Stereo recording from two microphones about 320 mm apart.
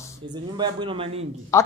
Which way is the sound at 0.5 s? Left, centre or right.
Centre.